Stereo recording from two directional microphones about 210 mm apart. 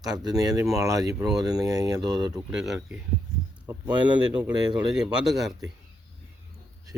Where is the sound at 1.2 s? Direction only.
5° right (ahead or behind).